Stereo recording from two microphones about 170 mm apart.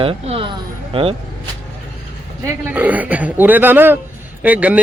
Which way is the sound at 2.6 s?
10° right (ahead or behind).